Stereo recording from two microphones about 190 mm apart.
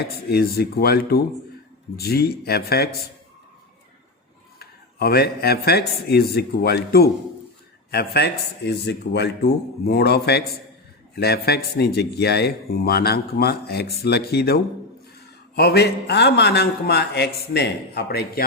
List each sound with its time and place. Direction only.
0.0 s speech: 55° left (ahead or behind)
4.6 s speech: 55° left (ahead or behind)